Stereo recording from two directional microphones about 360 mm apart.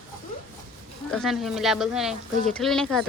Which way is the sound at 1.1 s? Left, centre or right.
Centre.